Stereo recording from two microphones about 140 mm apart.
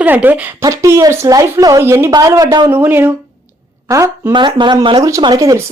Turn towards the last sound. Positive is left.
turn(degrees=-25)  # may be behind; listen again after turning